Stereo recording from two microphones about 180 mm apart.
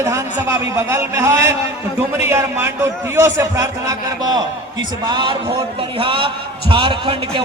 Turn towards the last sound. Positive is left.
turn(degrees=-25)  # may be behind; listen again after turning